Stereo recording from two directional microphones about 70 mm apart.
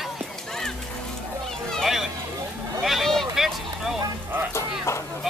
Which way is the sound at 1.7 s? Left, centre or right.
Centre.